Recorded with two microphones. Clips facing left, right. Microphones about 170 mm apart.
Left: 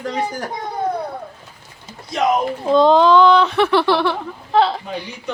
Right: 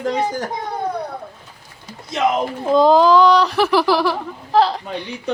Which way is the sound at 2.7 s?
5° right (ahead or behind).